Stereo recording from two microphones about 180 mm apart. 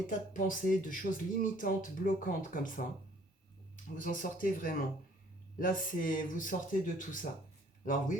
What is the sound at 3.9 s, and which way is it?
Speech, 45° left (ahead or behind).